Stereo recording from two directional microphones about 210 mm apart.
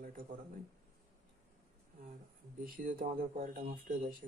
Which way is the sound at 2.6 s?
40° right (ahead or behind).